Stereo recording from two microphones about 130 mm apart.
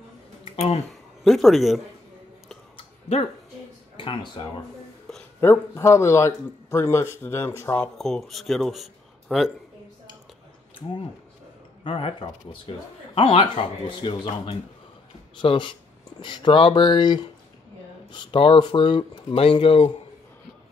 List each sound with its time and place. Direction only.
1.2 s a man's voice: centre (ahead or behind)
3.9 s speech: 40° left (ahead or behind)
5.1 s a sound: centre (ahead or behind)
5.4 s speech: 20° left (ahead or behind)
7.8 s speech: centre (ahead or behind)
11.8 s speech: 45° left (ahead or behind)